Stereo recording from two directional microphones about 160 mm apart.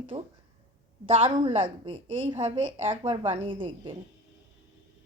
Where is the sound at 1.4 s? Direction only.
30° right (ahead or behind).